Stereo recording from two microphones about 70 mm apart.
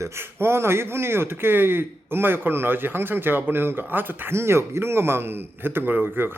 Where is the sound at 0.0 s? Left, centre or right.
Right.